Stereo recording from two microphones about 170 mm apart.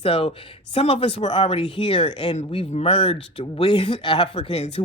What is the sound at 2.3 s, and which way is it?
Speech, 40° left (ahead or behind).